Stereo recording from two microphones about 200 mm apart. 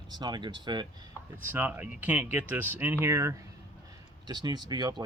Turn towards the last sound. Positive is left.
turn(degrees=-20)  # may be behind; listen again after turning